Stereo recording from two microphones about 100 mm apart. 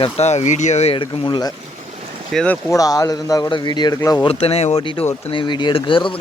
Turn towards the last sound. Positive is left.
turn(degrees=55)  # may be behind; listen again after turning